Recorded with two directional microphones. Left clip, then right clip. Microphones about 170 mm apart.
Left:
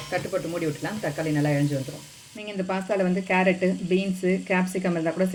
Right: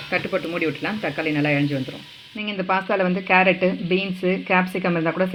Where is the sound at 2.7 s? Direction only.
25° right (ahead or behind).